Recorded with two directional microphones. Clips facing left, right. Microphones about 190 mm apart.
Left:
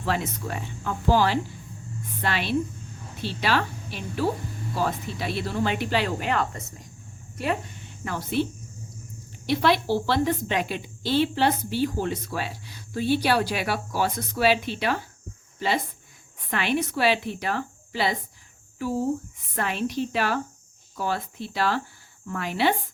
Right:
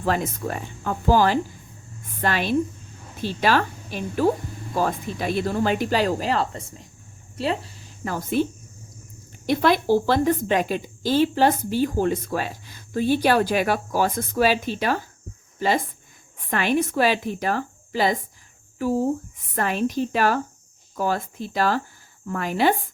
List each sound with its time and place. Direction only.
0.0 s a woman's voice: 45° right (ahead or behind)
9.5 s a woman's voice: 45° right (ahead or behind)
19.5 s a woman's voice: 45° right (ahead or behind)